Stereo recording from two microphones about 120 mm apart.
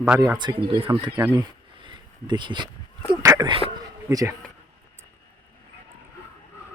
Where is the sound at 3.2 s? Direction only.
30° right (ahead or behind).